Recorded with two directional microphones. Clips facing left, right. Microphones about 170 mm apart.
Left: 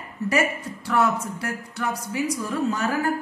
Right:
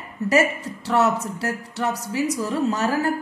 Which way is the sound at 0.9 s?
30° right (ahead or behind).